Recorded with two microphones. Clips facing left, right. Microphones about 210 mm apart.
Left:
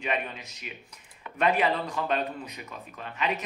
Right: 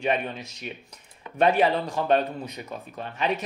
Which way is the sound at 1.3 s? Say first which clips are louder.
Right 4 dB; 35° right (ahead or behind).